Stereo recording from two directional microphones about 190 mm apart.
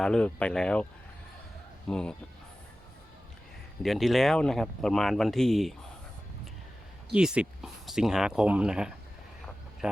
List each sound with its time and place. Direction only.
0.0 s speech: 5° left (ahead or behind)
1.9 s speech: 5° left (ahead or behind)
3.8 s speech: centre (ahead or behind)
7.1 s speech: 5° right (ahead or behind)